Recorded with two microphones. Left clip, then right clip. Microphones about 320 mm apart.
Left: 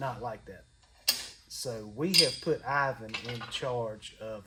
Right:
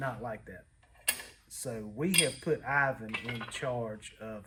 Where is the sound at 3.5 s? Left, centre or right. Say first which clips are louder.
Left 3 dB; centre.